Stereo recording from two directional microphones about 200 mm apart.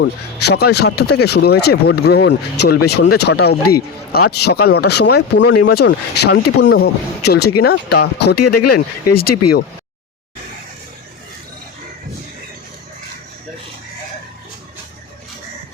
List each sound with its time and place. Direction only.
0.0 s speech: 55° left (ahead or behind)